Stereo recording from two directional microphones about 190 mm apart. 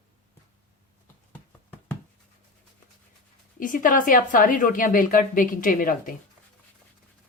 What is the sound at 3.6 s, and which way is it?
A woman's voice, 45° left (ahead or behind).